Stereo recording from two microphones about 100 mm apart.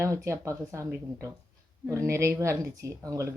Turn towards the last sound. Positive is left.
turn(degrees=-35)  # may be behind; listen again after turning